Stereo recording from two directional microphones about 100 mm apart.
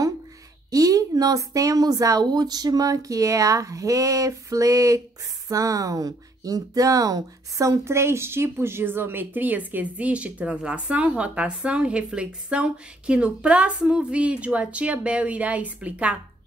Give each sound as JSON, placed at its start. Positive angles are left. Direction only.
{"t": 0.7, "sound": "a woman's voice", "side_deg": -35}